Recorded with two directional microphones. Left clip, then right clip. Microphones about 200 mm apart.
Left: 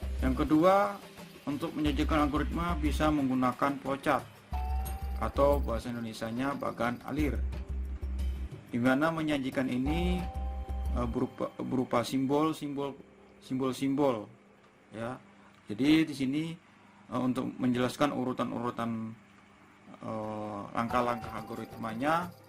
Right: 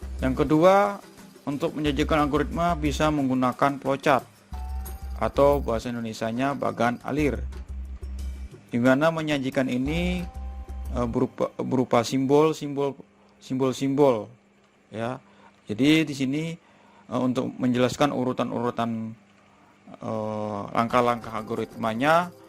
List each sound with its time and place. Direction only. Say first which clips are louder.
0.2 s a man's voice: right 6 dB; 35° right (ahead or behind)
5.2 s a man's voice: right 7 dB; 30° right (ahead or behind)
8.7 s a man's voice: right 7 dB; 35° right (ahead or behind)
20.0 s a man's voice: right 8 dB; 30° right (ahead or behind); by 22.2 s 55° right (ahead or behind)